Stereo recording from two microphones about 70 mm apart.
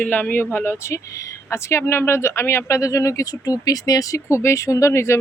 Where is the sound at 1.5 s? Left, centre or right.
Left.